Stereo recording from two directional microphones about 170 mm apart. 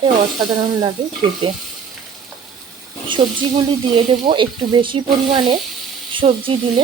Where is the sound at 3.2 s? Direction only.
30° right (ahead or behind).